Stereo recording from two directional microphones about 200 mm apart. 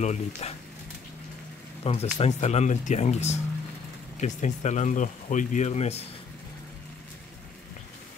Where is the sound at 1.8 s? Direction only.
30° left (ahead or behind).